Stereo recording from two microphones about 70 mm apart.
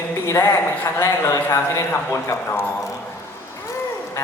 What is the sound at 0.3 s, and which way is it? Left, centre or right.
A woman's voice, left.